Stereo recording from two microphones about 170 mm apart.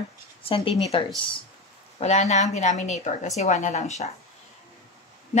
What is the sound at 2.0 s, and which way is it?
A woman's voice, 40° left (ahead or behind).